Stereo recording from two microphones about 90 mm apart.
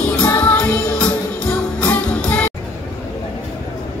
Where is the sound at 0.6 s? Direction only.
15° left (ahead or behind).